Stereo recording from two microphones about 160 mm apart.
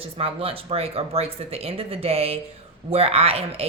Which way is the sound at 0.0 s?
35° right (ahead or behind).